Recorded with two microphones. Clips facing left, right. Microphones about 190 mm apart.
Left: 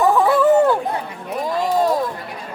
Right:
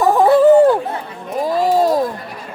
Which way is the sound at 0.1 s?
40° right (ahead or behind).